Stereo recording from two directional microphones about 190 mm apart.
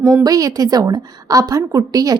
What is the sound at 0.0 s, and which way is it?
A woman's voice, 20° right (ahead or behind).